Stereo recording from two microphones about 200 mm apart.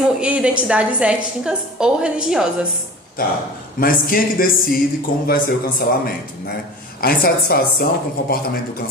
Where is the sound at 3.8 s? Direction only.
45° left (ahead or behind).